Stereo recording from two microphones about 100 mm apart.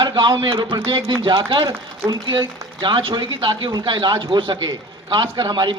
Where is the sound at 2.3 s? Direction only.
30° right (ahead or behind).